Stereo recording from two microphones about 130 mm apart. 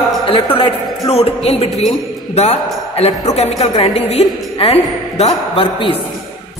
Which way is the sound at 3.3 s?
55° left (ahead or behind).